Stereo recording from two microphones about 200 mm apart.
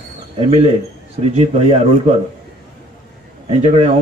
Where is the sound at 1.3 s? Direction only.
30° right (ahead or behind).